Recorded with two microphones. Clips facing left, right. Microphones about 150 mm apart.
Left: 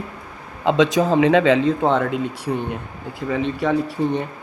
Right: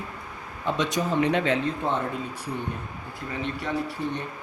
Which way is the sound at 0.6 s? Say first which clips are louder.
Left 10 dB; 90° left.